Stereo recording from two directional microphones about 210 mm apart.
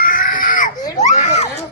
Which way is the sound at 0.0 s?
40° left (ahead or behind).